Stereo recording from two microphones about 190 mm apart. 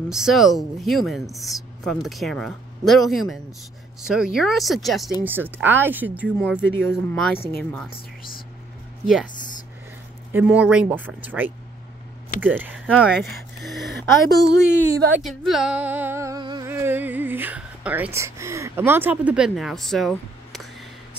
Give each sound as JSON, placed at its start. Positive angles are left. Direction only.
{"t": 0.1, "sound": "speech", "side_deg": 0}
{"t": 5.2, "sound": "music", "side_deg": -10}
{"t": 7.2, "sound": "speech", "side_deg": 5}
{"t": 9.0, "sound": "speech", "side_deg": 0}
{"t": 10.3, "sound": "music", "side_deg": -5}
{"t": 13.6, "sound": "speech", "side_deg": 0}
{"t": 13.8, "sound": "a woman's voice", "side_deg": -60}
{"t": 15.1, "sound": "music", "side_deg": 0}